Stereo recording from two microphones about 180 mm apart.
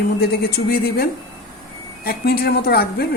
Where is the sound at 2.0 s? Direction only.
60° left (ahead or behind).